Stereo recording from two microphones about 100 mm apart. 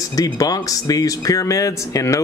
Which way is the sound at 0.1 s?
40° left (ahead or behind).